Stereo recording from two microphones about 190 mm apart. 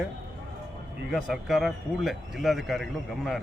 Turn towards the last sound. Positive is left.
turn(degrees=0)  # may be behind; listen again after turning